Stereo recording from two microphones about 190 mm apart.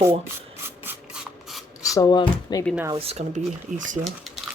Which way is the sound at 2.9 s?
30° right (ahead or behind).